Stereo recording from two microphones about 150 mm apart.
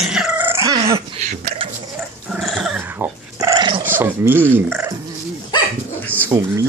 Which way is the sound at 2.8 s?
15° right (ahead or behind).